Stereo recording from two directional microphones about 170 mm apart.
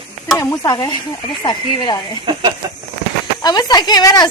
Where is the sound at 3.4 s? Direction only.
25° left (ahead or behind).